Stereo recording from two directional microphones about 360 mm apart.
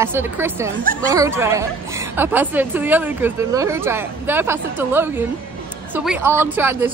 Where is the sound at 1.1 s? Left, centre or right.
Centre.